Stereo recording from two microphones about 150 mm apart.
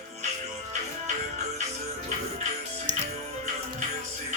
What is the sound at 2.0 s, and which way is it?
Music, 50° right (ahead or behind).